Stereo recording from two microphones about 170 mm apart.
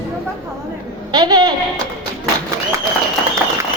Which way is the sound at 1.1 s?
25° right (ahead or behind).